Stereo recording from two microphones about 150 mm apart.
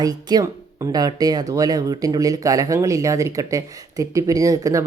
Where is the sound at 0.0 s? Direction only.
25° right (ahead or behind).